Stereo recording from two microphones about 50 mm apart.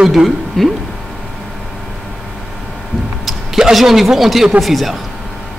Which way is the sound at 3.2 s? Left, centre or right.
Centre.